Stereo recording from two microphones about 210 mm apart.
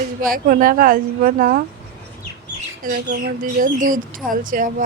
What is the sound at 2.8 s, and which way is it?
Speech, 40° right (ahead or behind).